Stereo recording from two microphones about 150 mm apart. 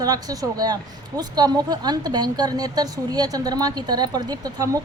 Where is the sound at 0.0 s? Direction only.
25° right (ahead or behind).